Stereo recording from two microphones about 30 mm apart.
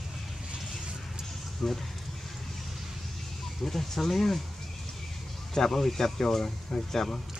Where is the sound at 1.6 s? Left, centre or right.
Centre.